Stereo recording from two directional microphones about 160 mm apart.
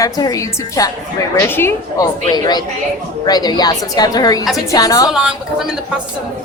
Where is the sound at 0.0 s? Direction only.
20° left (ahead or behind).